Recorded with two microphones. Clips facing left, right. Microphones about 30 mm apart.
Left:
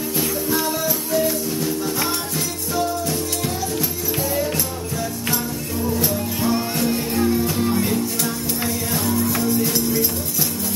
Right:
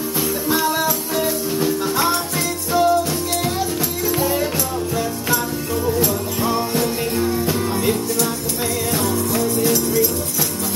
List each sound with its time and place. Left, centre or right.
0.8 s music: right
2.0 s music: right
4.2 s music: right